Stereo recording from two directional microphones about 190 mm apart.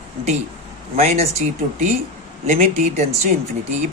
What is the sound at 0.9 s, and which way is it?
Speech, 35° right (ahead or behind).